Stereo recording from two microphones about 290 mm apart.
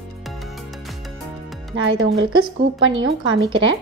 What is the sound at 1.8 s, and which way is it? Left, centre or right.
Speech, right.